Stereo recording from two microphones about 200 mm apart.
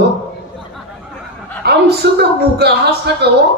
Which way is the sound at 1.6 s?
55° right (ahead or behind).